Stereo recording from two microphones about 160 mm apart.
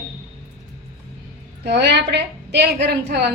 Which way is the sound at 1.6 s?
90° right.